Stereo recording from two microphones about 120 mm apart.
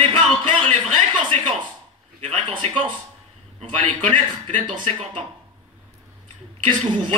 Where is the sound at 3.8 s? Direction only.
90° right; by 5.2 s 65° right (ahead or behind).